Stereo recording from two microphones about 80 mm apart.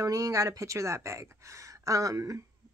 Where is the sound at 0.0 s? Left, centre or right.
Right.